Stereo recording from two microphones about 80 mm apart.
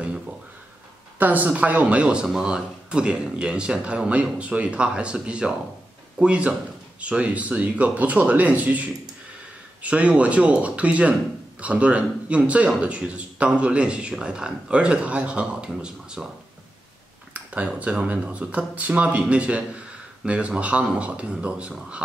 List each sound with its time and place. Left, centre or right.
1.1 s a man's voice: right
17.3 s a man's voice: centre